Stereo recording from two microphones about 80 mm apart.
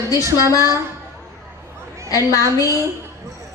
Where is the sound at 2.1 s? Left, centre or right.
Left.